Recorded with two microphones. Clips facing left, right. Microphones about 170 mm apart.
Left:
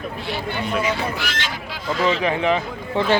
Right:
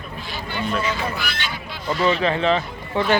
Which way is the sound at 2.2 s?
15° left (ahead or behind).